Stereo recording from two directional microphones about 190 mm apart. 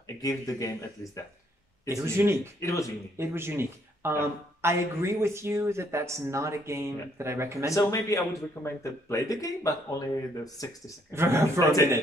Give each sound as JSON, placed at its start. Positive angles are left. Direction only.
{"t": 0.2, "sound": "speech", "side_deg": 20}
{"t": 2.0, "sound": "a man's voice", "side_deg": -15}
{"t": 2.6, "sound": "speech", "side_deg": 15}
{"t": 3.2, "sound": "a man's voice", "side_deg": -15}
{"t": 7.6, "sound": "speech", "side_deg": 15}
{"t": 11.1, "sound": "a man's voice", "side_deg": -15}